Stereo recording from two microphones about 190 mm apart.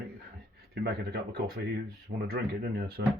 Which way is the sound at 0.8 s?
55° right (ahead or behind).